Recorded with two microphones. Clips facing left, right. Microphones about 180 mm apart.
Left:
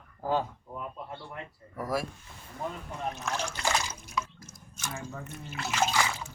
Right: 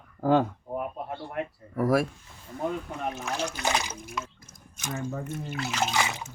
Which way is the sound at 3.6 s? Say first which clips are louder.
Right 2 dB; 20° right (ahead or behind).